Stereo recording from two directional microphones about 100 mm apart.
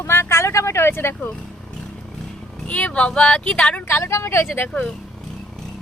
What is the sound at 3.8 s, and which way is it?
Speech, 25° left (ahead or behind).